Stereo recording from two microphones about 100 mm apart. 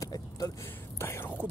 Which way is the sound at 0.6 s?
25° left (ahead or behind).